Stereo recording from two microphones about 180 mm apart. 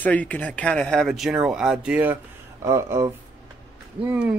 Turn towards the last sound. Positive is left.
turn(degrees=-5)  # may be behind; listen again after turning